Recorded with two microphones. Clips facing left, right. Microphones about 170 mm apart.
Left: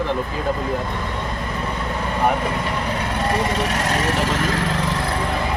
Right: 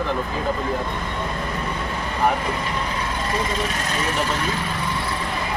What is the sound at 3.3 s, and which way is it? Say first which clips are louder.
Speech: left 4 dB; 70° left (ahead or behind).